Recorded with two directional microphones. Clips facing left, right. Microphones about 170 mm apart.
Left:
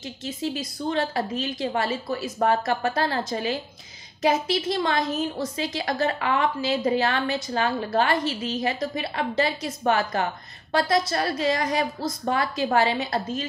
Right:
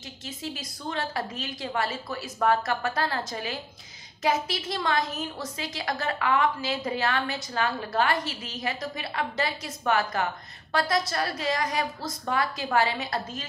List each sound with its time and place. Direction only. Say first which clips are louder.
0.8 s a woman's voice: left 5 dB; 25° left (ahead or behind)